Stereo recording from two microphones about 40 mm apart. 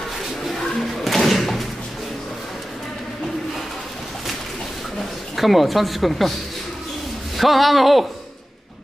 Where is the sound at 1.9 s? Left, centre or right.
Centre.